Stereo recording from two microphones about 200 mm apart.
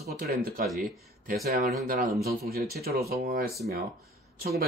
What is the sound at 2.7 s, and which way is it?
Speech, 50° right (ahead or behind).